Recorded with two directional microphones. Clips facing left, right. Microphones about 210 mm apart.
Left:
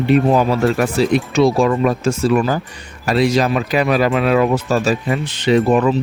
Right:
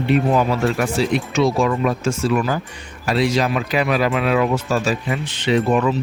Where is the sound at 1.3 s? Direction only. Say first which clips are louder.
Left 3 dB; 35° left (ahead or behind).